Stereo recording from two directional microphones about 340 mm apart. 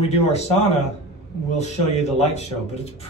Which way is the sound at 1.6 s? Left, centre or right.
Centre.